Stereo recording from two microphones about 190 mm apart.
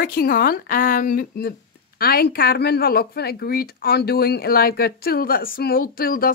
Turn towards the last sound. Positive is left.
turn(degrees=50)  # may be behind; listen again after turning